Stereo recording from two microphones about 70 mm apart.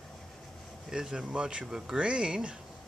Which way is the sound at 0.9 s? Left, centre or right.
Centre.